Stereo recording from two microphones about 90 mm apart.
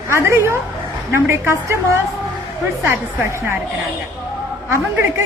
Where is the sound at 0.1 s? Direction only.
30° right (ahead or behind).